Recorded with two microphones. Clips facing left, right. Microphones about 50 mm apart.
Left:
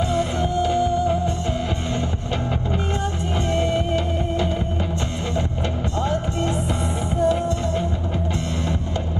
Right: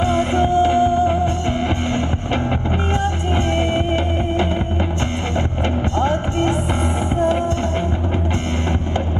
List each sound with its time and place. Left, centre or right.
0.0 s music: right
3.5 s music: right
5.9 s music: right